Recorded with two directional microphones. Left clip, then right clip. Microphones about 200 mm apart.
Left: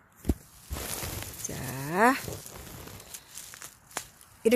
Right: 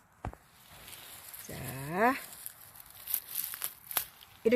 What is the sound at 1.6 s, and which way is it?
Speech, 20° left (ahead or behind).